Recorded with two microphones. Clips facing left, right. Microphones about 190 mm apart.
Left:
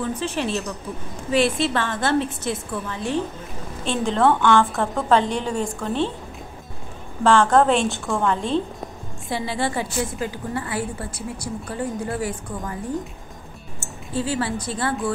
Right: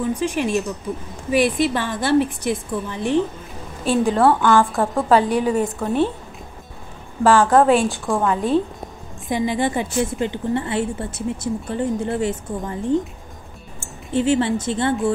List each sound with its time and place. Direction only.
0.0 s a woman's voice: 10° right (ahead or behind)
3.8 s a woman's voice: 5° right (ahead or behind)
7.4 s a woman's voice: 5° right (ahead or behind)
9.3 s a woman's voice: 20° right (ahead or behind)
14.1 s a woman's voice: 25° right (ahead or behind)